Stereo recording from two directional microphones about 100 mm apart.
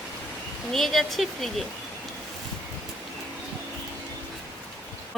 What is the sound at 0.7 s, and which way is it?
Speech, centre (ahead or behind).